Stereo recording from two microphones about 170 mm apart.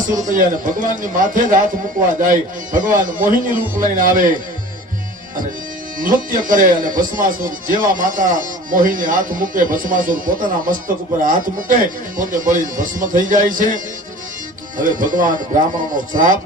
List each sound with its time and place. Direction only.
0.0 s speech: 50° right (ahead or behind)
6.0 s speech: 50° right (ahead or behind)